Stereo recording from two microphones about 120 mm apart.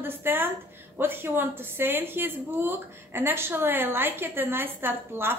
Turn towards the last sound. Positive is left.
turn(degrees=-20)  # may be behind; listen again after turning